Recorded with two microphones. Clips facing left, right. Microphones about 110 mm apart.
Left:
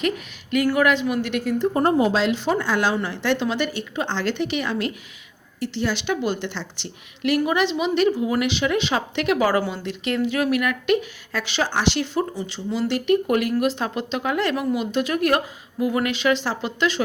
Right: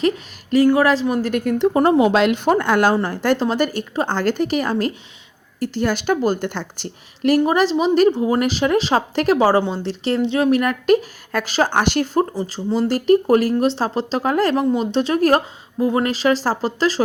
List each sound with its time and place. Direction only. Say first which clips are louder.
0.5 s speech: right 5 dB; 30° right (ahead or behind)
1.5 s speech: right 4 dB; 90° right; by 2.9 s 55° right (ahead or behind)
2.9 s a woman's voice: right 5 dB; 45° right (ahead or behind)